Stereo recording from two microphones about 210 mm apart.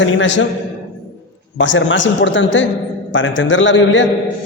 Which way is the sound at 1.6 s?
65° left (ahead or behind).